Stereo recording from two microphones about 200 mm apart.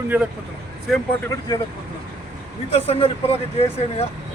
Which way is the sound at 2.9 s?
30° left (ahead or behind).